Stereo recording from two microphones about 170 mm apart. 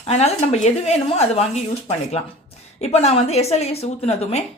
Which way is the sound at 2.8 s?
40° left (ahead or behind).